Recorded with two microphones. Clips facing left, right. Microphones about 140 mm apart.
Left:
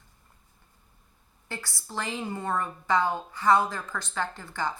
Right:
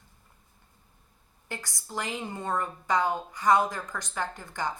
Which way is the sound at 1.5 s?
20° right (ahead or behind).